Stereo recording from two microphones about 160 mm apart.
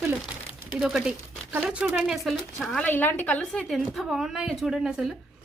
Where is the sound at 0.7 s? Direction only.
5° right (ahead or behind).